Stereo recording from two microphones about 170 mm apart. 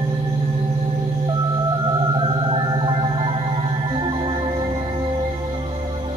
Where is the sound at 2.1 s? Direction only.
30° right (ahead or behind).